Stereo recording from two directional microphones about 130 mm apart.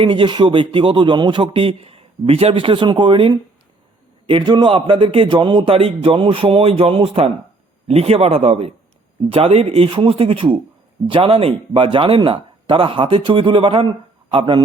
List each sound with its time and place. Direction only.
0.0 s speech: 40° right (ahead or behind)